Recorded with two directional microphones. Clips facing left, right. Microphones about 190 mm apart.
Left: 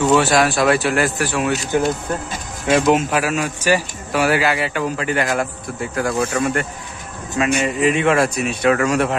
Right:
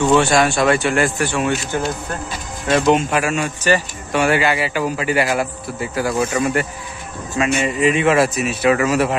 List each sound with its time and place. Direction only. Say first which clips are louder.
0.0 s speech: right 1 dB; 5° left (ahead or behind)
2.7 s speech: even; 5° left (ahead or behind)